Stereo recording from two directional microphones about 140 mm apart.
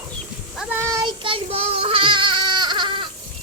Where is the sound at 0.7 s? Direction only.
20° right (ahead or behind).